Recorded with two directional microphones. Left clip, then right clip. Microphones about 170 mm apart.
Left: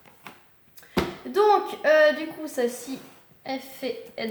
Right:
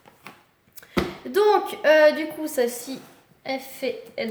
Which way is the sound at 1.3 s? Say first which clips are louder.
Right 1 dB; 40° right (ahead or behind).